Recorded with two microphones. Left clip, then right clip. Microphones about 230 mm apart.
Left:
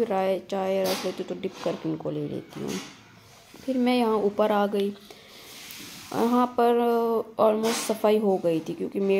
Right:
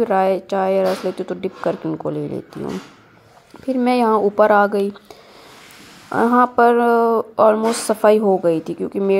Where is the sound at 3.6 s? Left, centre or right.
Right.